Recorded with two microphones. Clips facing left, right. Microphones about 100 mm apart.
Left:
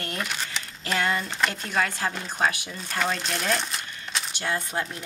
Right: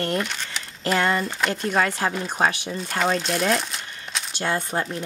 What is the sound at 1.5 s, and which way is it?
Speech, 30° right (ahead or behind).